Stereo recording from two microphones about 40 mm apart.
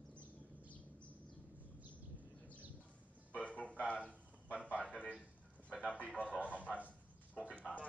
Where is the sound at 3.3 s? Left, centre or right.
Left.